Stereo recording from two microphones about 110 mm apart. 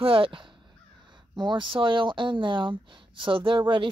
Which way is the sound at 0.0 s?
55° right (ahead or behind).